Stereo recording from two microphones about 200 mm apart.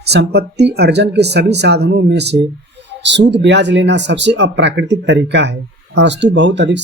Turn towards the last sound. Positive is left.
turn(degrees=-60)  # may be behind; listen again after turning